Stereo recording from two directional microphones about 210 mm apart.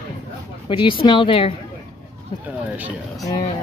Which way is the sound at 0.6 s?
25° left (ahead or behind).